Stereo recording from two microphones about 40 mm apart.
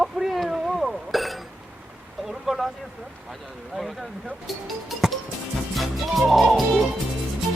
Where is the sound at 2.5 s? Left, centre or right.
Centre.